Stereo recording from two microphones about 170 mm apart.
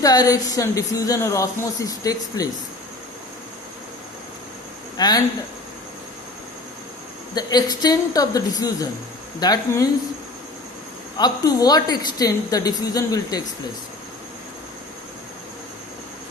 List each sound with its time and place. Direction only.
0.0 s a woman's voice: 20° left (ahead or behind)
4.9 s speech: 25° left (ahead or behind)
7.3 s a woman's voice: 25° left (ahead or behind)
11.2 s a woman's voice: 25° left (ahead or behind)